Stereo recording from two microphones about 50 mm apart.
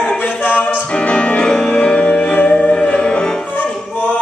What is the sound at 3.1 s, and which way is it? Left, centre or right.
Opera, centre.